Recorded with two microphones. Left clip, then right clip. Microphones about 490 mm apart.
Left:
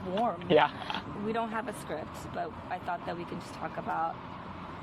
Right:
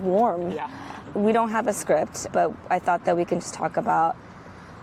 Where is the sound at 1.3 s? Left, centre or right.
Right.